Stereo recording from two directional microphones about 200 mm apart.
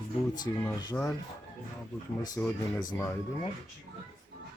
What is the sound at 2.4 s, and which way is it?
Speech, 10° left (ahead or behind).